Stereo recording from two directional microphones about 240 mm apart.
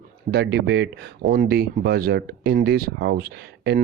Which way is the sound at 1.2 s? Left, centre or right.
Right.